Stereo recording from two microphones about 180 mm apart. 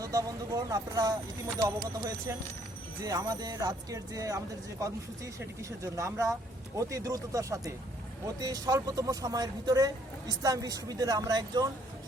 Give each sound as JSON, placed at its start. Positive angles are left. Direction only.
{"t": 0.0, "sound": "speech", "side_deg": -20}